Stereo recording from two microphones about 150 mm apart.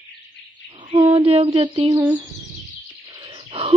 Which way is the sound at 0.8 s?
40° right (ahead or behind).